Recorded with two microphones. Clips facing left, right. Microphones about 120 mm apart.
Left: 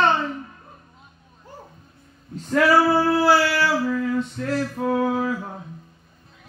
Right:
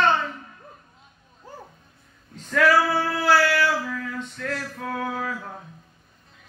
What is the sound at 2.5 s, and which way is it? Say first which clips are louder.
Female singing: left 2 dB; 30° left (ahead or behind).